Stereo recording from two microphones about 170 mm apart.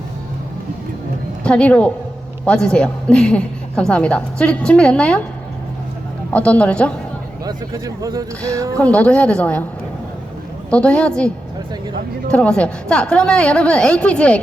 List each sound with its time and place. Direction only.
1.5 s a woman's voice: 5° left (ahead or behind)
6.3 s a woman's voice: 5° left (ahead or behind)
7.4 s speech: 20° right (ahead or behind)
8.8 s a woman's voice: 10° left (ahead or behind)
10.7 s a woman's voice: 5° left (ahead or behind)
12.3 s a woman's voice: 5° left (ahead or behind)